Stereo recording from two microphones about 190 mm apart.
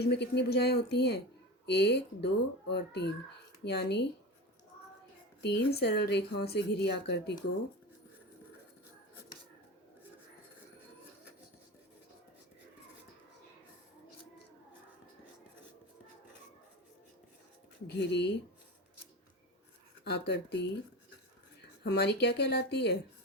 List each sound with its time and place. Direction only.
0.0 s a woman's voice: 60° left (ahead or behind)
5.4 s a woman's voice: 60° left (ahead or behind)
17.8 s a woman's voice: 65° left (ahead or behind)
20.1 s a woman's voice: 60° left (ahead or behind)
21.8 s a woman's voice: 60° left (ahead or behind)